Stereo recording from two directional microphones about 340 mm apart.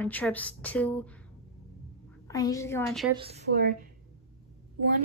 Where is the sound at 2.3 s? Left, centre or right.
Centre.